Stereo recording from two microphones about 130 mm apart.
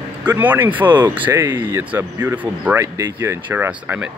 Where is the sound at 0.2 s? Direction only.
15° right (ahead or behind).